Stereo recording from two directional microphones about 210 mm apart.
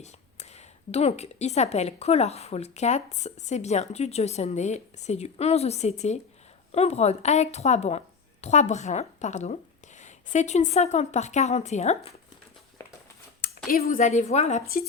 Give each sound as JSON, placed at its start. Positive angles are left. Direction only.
{"t": 0.0, "sound": "a woman's voice", "side_deg": 30}
{"t": 13.7, "sound": "a woman's voice", "side_deg": 45}